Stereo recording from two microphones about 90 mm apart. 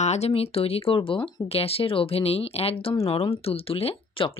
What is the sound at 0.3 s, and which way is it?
Speech, 90° left.